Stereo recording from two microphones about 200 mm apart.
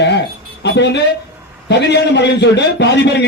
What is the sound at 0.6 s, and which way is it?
A woman's voice, 60° left (ahead or behind).